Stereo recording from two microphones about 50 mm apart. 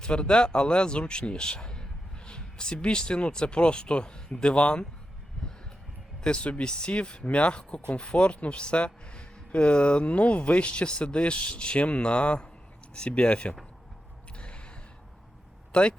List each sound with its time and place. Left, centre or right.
0.0 s speech: centre
5.4 s a sound: centre
6.2 s speech: left
14.3 s gasp: left
15.7 s speech: left